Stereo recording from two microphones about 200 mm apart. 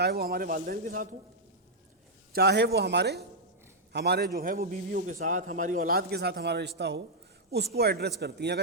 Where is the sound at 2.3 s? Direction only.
55° right (ahead or behind).